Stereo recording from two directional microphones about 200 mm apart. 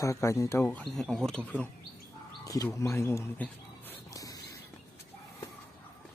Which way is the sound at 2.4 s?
15° left (ahead or behind).